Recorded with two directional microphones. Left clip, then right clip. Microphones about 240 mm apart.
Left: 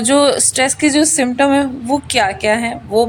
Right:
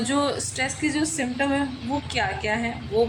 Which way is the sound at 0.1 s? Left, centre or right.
Left.